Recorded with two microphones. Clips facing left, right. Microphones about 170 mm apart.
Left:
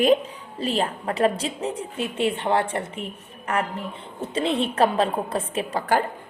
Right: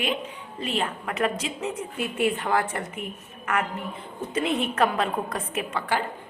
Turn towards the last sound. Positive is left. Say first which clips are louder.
# left 4 dB
turn(degrees=40)  # may be behind; listen again after turning